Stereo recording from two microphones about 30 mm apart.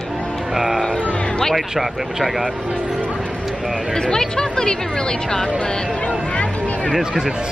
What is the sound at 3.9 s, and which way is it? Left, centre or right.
Speech, left.